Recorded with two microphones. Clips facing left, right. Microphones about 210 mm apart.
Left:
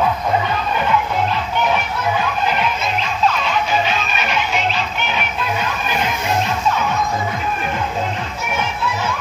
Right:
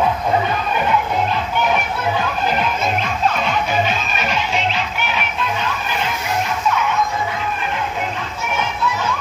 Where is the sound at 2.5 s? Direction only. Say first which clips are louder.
Right 1 dB; 50° right (ahead or behind).